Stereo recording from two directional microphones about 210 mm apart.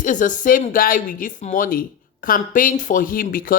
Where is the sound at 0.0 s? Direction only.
40° left (ahead or behind).